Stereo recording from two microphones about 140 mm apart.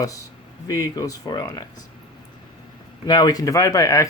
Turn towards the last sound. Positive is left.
turn(degrees=25)  # may be behind; listen again after turning